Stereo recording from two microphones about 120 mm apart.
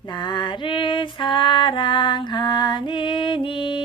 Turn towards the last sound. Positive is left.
turn(degrees=45)  # may be behind; listen again after turning